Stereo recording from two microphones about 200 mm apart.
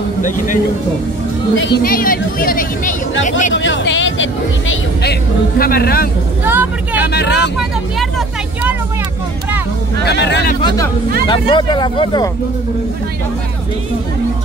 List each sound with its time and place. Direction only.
1.6 s speech: 50° left (ahead or behind)
3.5 s speech: 70° left (ahead or behind)
5.6 s speech: 50° left (ahead or behind)
6.4 s speech: 10° right (ahead or behind)
7.0 s speech: 55° left (ahead or behind)
10.0 s speech: 60° left (ahead or behind)
11.2 s speech: 25° left (ahead or behind)